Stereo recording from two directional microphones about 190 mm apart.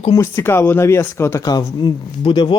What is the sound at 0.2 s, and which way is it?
Speech, 15° left (ahead or behind).